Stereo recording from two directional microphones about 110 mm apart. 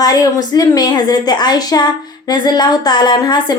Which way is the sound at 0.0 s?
35° left (ahead or behind).